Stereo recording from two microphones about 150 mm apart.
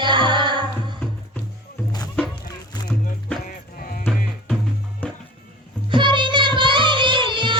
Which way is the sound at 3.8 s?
70° left (ahead or behind).